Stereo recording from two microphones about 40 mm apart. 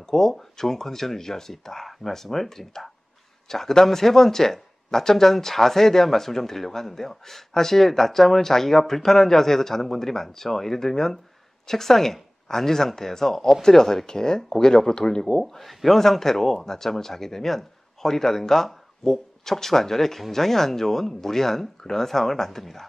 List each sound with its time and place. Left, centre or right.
0.0 s speech: centre